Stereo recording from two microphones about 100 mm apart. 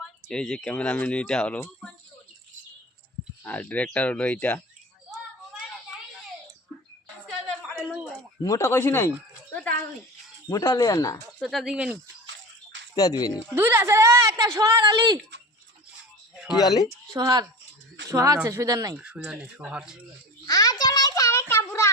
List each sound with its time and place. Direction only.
0.0 s speech: 5° left (ahead or behind)
3.4 s speech: 15° left (ahead or behind)
5.1 s a sound: 5° right (ahead or behind)
8.4 s speech: 30° left (ahead or behind)
10.5 s speech: 40° left (ahead or behind)
11.4 s speech: centre (ahead or behind)
13.0 s speech: 40° left (ahead or behind)
13.5 s a woman's voice: 25° right (ahead or behind)
14.8 s speech: 50° right (ahead or behind)
16.6 s speech: 40° left (ahead or behind)
17.2 s speech: 35° right (ahead or behind)
19.3 s speech: 10° right (ahead or behind)
20.5 s a sound: 40° left (ahead or behind)